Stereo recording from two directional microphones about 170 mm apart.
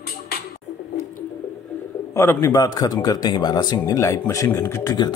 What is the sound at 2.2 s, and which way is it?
Speech, 15° left (ahead or behind).